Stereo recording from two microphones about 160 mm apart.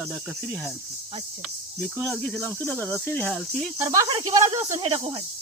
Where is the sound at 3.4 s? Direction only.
5° left (ahead or behind).